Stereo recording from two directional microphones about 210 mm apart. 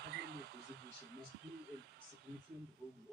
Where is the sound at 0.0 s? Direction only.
55° right (ahead or behind).